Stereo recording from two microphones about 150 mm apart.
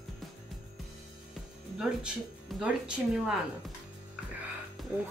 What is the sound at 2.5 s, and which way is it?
Music, centre (ahead or behind).